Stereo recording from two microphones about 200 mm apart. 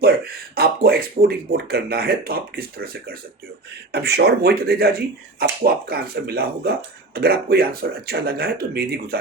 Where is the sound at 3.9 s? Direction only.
55° right (ahead or behind).